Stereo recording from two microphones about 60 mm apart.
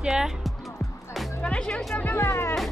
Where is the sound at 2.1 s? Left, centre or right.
Left.